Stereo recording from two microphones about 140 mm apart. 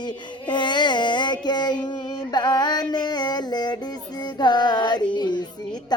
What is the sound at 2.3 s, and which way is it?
Music, 30° left (ahead or behind).